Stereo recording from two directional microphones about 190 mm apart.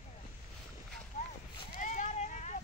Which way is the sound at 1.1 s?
45° left (ahead or behind).